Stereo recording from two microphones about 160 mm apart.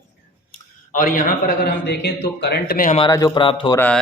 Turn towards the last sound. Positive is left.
turn(degrees=10)  # may be behind; listen again after turning